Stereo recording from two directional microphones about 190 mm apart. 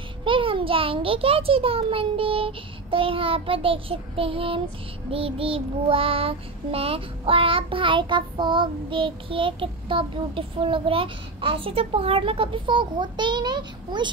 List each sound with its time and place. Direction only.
0.2 s child singing: 25° right (ahead or behind)